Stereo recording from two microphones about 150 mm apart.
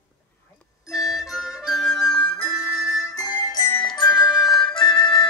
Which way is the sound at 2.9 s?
25° left (ahead or behind).